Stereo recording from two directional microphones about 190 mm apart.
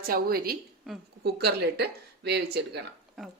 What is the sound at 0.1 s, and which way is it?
A woman's voice, 55° right (ahead or behind).